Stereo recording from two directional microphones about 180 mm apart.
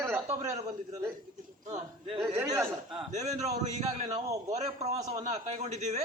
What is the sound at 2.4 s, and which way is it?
Speech, 15° right (ahead or behind).